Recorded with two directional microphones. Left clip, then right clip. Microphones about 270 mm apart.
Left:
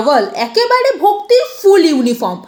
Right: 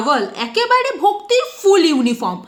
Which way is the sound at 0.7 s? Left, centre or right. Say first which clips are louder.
Left 2 dB; centre.